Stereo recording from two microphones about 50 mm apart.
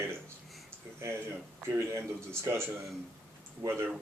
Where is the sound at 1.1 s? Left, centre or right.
Right.